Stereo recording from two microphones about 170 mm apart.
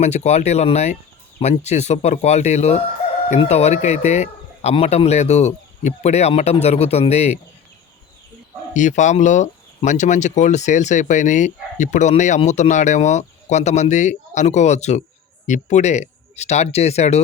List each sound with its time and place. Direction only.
0.0 s speech: 40° left (ahead or behind)
8.7 s speech: 45° left (ahead or behind)